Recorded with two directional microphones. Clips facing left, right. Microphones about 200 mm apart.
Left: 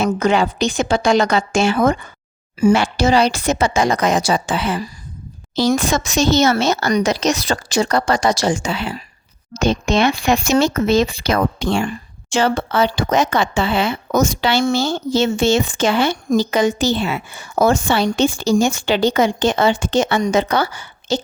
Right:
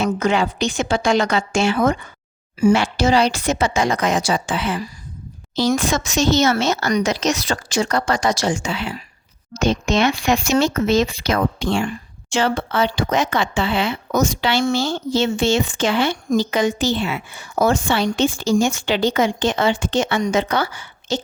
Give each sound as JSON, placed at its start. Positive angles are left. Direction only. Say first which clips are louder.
{"t": 0.0, "sound": "speech", "louder": "left 2 dB", "side_deg": 40}